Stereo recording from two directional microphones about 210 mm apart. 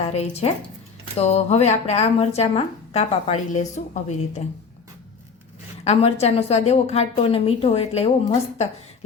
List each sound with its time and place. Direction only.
0.0 s a woman's voice: 30° left (ahead or behind)
5.8 s a woman's voice: 30° left (ahead or behind)